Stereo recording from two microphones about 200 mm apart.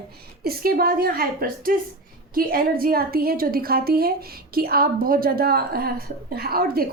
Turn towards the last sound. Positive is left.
turn(degrees=-50)  # may be behind; listen again after turning